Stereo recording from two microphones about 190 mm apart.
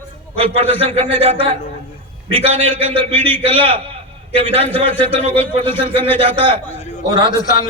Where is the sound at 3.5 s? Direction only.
30° right (ahead or behind).